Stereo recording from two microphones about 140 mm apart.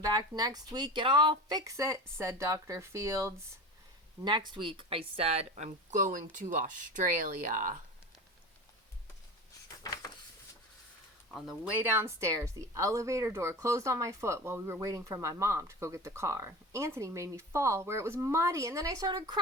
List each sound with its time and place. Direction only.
0.0 s speech: 30° right (ahead or behind)
4.2 s speech: 35° right (ahead or behind); by 7.8 s 75° right (ahead or behind)
9.8 s a sound: 25° left (ahead or behind)
11.3 s speech: 5° right (ahead or behind); by 19.4 s 30° right (ahead or behind)